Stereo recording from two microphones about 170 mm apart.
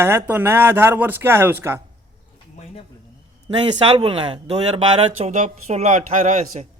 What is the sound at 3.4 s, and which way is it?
Speech, 25° right (ahead or behind).